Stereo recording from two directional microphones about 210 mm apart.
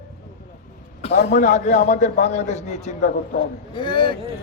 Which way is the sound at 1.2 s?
35° left (ahead or behind).